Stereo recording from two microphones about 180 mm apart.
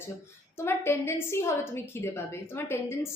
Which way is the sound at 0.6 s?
15° left (ahead or behind).